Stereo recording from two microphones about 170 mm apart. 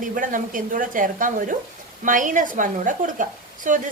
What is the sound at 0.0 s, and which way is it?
A woman's voice, 50° right (ahead or behind).